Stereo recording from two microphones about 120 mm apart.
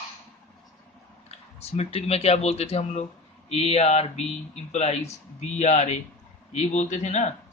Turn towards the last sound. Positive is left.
turn(degrees=85)